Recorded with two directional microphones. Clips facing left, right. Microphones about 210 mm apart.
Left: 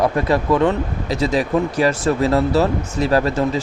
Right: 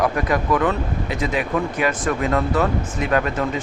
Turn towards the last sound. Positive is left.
turn(degrees=30)  # may be behind; listen again after turning